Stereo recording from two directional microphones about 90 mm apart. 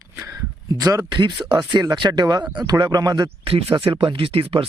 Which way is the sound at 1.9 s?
55° right (ahead or behind).